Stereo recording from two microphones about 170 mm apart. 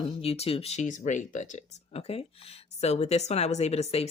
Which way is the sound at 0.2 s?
35° left (ahead or behind).